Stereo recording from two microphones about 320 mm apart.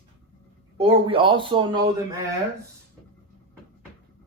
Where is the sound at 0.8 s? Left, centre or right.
Centre.